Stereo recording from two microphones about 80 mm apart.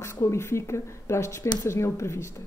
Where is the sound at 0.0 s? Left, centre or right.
Left.